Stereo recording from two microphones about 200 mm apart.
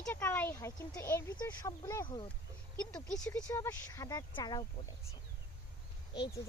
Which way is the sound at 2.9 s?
5° left (ahead or behind).